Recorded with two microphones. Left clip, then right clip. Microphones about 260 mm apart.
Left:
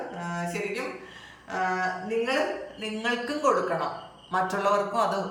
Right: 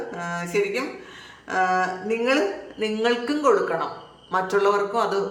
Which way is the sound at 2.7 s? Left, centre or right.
Centre.